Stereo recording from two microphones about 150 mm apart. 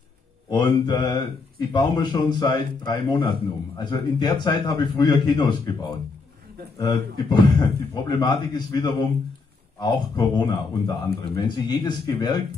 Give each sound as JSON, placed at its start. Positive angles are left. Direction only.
{"t": 0.5, "sound": "a man's voice", "side_deg": 30}